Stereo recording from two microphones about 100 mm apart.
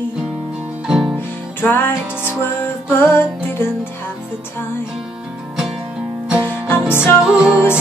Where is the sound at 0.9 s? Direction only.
5° right (ahead or behind).